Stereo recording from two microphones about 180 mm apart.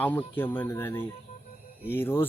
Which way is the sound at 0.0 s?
10° left (ahead or behind).